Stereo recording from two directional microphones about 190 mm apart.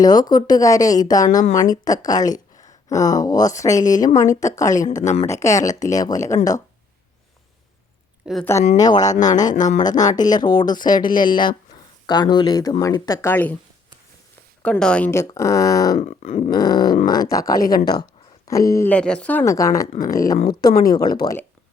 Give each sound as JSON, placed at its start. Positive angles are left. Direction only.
{"t": 0.0, "sound": "speech", "side_deg": 20}
{"t": 1.3, "sound": "speech", "side_deg": 40}
{"t": 1.5, "sound": "speech", "side_deg": 20}
{"t": 8.2, "sound": "speech", "side_deg": -5}
{"t": 8.7, "sound": "speech", "side_deg": 20}
{"t": 9.6, "sound": "a sound", "side_deg": 40}
{"t": 9.8, "sound": "speech", "side_deg": 20}
{"t": 14.6, "sound": "speech", "side_deg": 5}
{"t": 16.0, "sound": "a sound", "side_deg": 35}
{"t": 16.5, "sound": "speech", "side_deg": 20}
{"t": 16.9, "sound": "speech", "side_deg": 50}
{"t": 17.2, "sound": "speech", "side_deg": 20}
{"t": 19.9, "sound": "speech", "side_deg": 45}